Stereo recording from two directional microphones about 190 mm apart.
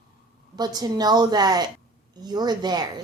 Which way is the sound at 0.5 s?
20° right (ahead or behind).